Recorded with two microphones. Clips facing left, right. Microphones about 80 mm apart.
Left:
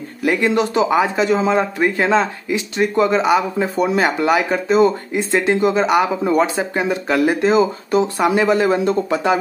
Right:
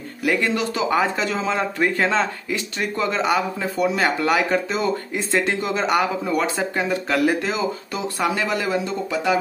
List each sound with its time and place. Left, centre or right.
0.2 s speech: left
0.8 s speech: centre
8.6 s speech: left